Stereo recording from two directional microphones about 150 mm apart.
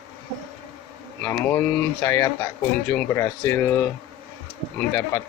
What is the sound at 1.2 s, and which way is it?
Speech, 10° left (ahead or behind).